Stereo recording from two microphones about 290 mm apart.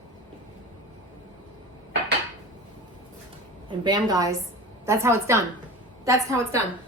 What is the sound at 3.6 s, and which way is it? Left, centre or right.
A woman's voice, centre.